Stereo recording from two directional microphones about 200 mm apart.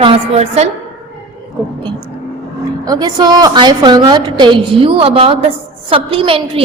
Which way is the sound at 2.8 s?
20° right (ahead or behind).